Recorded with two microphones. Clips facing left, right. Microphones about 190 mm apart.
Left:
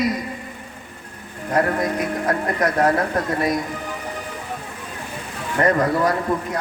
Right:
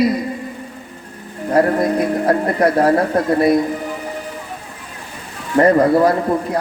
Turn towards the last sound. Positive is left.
turn(degrees=-35)  # may be behind; listen again after turning